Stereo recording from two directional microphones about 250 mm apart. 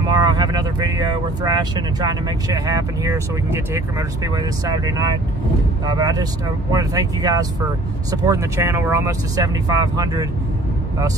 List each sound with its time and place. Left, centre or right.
0.1 s speech: centre